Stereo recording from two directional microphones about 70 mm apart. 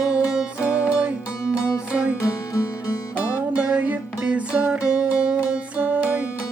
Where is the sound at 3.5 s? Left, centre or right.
Centre.